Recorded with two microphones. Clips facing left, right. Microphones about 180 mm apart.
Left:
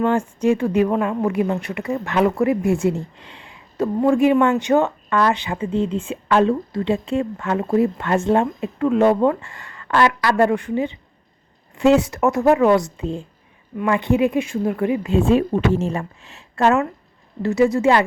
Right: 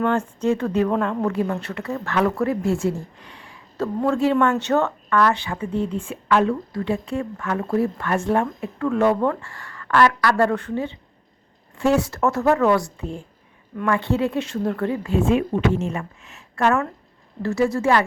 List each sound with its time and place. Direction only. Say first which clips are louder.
0.0 s speech: left 3 dB; 10° left (ahead or behind)
15.1 s speech: left 2 dB; 35° left (ahead or behind)